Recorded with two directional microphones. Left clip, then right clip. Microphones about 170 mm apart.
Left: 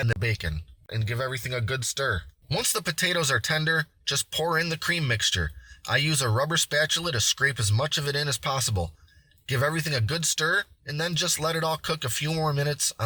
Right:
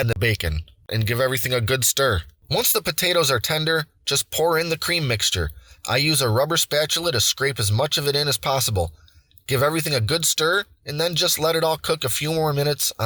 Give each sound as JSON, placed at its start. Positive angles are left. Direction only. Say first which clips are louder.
{"t": 0.2, "sound": "speech", "louder": "right 7 dB", "side_deg": -45}
{"t": 2.5, "sound": "speech", "louder": "right 6 dB", "side_deg": -25}